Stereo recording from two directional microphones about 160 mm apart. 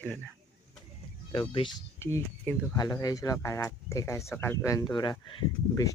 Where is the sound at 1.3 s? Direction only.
30° left (ahead or behind).